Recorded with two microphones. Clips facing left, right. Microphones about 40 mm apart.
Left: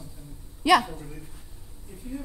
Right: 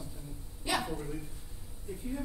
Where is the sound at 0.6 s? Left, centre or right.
Left.